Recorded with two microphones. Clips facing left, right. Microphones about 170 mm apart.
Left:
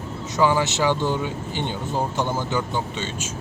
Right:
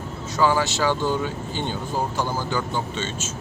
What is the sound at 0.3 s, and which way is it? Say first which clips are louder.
Speech: left 1 dB; 20° left (ahead or behind).